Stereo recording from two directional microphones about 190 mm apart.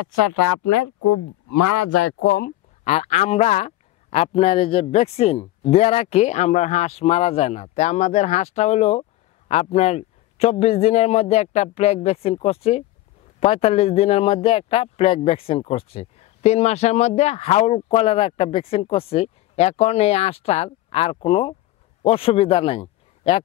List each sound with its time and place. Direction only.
2.0 s speech: 80° left
2.8 s a man's voice: 35° left (ahead or behind)